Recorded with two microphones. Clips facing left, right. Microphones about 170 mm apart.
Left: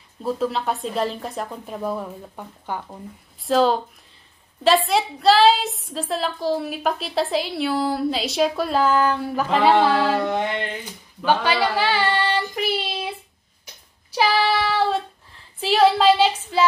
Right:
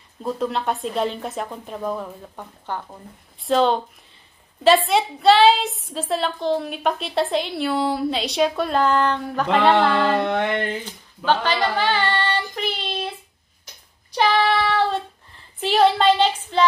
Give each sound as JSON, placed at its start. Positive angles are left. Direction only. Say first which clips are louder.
{"t": 0.2, "sound": "a woman's voice", "louder": "left 1 dB", "side_deg": 0}
{"t": 10.2, "sound": "a sound", "louder": "right 2 dB", "side_deg": -60}
{"t": 11.2, "sound": "child singing", "louder": "left 1 dB", "side_deg": 10}
{"t": 14.1, "sound": "child singing", "louder": "right 1 dB", "side_deg": 5}
{"t": 15.6, "sound": "a woman's voice", "louder": "left 1 dB", "side_deg": 0}